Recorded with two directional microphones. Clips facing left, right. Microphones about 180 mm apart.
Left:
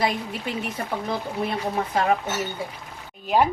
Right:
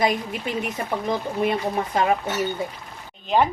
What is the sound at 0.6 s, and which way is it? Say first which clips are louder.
Speech: right 2 dB; 15° right (ahead or behind).